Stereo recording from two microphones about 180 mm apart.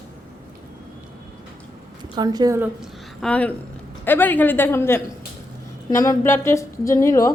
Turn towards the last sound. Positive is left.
turn(degrees=15)  # may be behind; listen again after turning